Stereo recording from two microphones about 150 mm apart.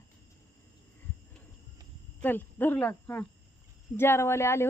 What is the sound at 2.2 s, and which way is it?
Speech, 15° left (ahead or behind).